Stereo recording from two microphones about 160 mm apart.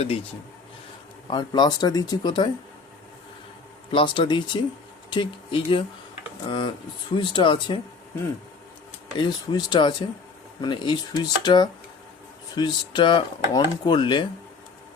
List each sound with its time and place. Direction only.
1.3 s speech: 25° left (ahead or behind)
3.9 s speech: 30° left (ahead or behind)
9.1 s speech: 30° left (ahead or behind)